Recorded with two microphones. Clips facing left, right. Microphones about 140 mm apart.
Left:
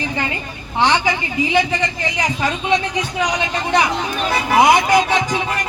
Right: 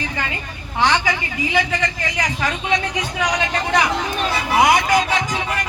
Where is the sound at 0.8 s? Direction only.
20° left (ahead or behind).